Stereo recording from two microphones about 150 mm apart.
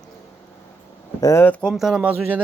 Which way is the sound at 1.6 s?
Centre (ahead or behind).